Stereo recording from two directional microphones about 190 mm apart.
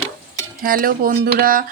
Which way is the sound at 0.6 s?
50° right (ahead or behind).